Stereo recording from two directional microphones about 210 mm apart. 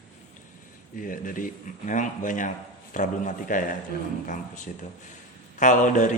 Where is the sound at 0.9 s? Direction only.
40° left (ahead or behind).